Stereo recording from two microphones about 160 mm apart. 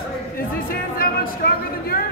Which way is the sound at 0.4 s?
65° left (ahead or behind).